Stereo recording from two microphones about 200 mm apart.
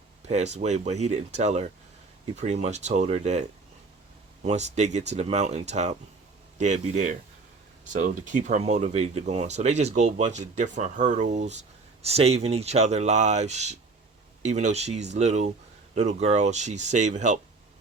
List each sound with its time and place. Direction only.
0.3 s speech: 35° right (ahead or behind)
4.4 s speech: 35° right (ahead or behind)
8.3 s speech: 40° right (ahead or behind)